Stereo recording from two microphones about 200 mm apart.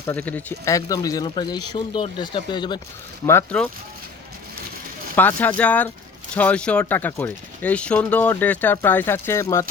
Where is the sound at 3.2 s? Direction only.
10° left (ahead or behind).